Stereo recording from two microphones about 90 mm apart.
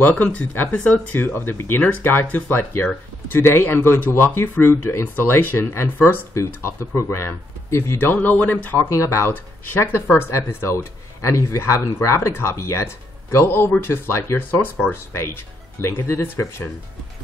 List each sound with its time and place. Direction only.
0.0 s speech: 15° left (ahead or behind)
15.8 s speech: 25° left (ahead or behind)